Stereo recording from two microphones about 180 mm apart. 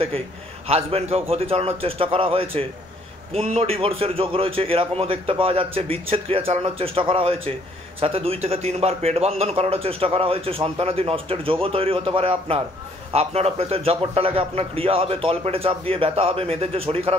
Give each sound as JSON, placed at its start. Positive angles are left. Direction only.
{"t": 0.7, "sound": "a man's voice", "side_deg": -35}